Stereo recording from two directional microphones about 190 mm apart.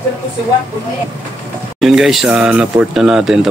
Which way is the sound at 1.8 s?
Centre (ahead or behind).